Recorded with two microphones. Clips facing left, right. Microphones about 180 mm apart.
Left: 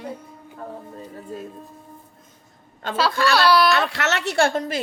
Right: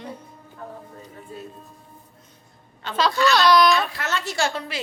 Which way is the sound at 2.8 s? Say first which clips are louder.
Left 5 dB; 50° left (ahead or behind).